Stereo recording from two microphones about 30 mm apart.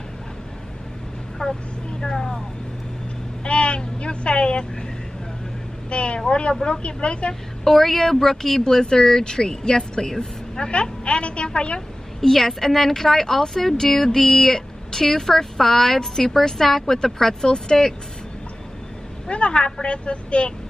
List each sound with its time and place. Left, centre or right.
1.4 s speech: left
2.0 s vehicle: centre
3.4 s vehicle: left
5.9 s speech: left
7.6 s a woman's voice: centre
10.7 s speech: left
12.2 s a woman's voice: centre
19.2 s speech: left